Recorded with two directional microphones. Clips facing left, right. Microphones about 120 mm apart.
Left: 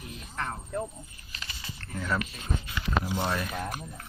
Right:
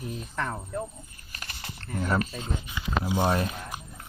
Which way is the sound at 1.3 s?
55° right (ahead or behind).